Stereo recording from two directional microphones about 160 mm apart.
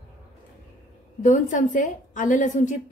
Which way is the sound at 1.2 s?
50° left (ahead or behind).